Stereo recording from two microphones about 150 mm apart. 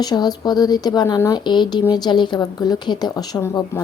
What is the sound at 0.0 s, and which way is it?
Speech, 25° left (ahead or behind).